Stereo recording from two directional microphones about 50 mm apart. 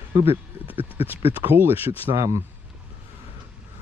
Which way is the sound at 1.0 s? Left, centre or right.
Right.